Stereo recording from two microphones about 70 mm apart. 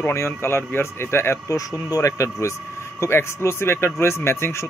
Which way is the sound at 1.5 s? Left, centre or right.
Left.